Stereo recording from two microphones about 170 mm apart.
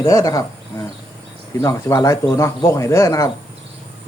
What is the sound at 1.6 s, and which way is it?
Speech, 15° left (ahead or behind).